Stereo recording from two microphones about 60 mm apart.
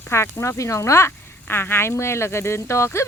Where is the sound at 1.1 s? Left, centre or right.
Left.